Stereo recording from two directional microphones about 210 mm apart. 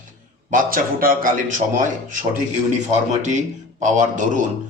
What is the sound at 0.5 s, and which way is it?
A man's voice, 40° right (ahead or behind).